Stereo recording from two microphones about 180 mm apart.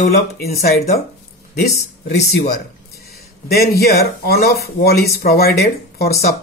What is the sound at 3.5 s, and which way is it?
Speech, 60° left (ahead or behind).